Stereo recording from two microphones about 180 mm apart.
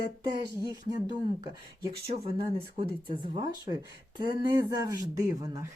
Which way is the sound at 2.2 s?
30° right (ahead or behind).